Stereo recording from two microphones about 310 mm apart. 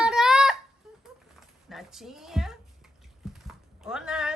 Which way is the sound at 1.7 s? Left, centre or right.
Centre.